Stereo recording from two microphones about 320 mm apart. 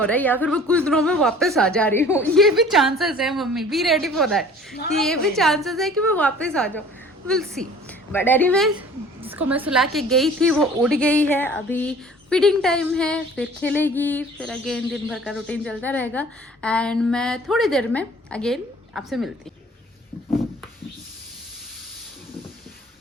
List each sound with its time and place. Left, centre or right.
0.0 s a woman's voice: centre